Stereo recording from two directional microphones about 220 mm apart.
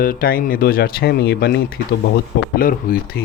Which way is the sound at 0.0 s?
40° left (ahead or behind).